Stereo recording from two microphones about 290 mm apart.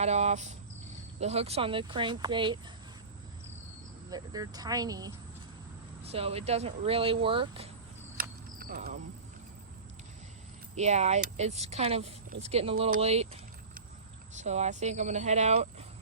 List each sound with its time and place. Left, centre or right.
0.0 s speech: right
4.1 s speech: centre
8.2 s a sound: right
10.8 s speech: right
12.8 s vehicle: right
14.3 s speech: right